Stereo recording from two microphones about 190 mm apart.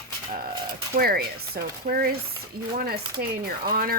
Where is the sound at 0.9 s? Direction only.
55° right (ahead or behind).